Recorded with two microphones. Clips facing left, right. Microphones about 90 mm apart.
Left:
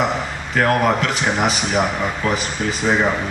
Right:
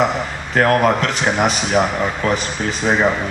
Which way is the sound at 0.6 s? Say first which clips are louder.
Right 2 dB; 45° right (ahead or behind).